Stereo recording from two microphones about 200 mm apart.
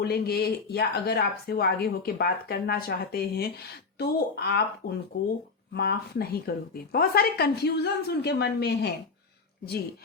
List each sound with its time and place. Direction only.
0.0 s speech: 50° left (ahead or behind)